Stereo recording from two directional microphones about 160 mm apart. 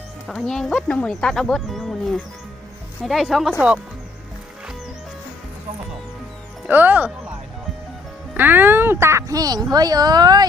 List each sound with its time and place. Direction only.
0.3 s speech: 5° left (ahead or behind)
6.7 s speech: 10° right (ahead or behind)
8.4 s speech: 10° right (ahead or behind)